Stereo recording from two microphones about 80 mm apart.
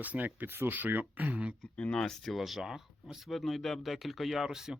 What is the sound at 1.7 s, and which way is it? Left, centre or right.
Speech, centre.